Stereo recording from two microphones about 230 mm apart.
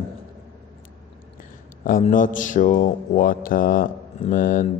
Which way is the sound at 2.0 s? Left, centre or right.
Left.